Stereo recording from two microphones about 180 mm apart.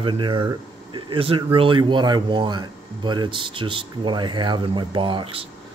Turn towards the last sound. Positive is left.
turn(degrees=-30)  # may be behind; listen again after turning